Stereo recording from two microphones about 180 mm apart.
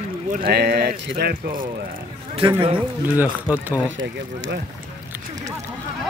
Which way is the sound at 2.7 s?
10° right (ahead or behind).